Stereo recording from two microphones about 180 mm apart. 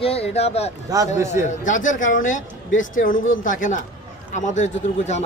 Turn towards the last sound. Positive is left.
turn(degrees=40)  # may be behind; listen again after turning